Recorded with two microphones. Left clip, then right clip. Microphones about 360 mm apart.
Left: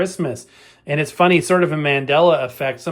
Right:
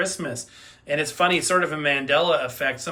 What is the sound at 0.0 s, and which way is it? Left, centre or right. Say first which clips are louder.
Speech: left 5 dB; centre.